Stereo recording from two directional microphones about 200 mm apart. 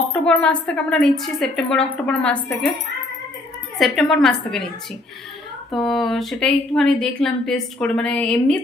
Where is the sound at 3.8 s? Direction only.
Centre (ahead or behind).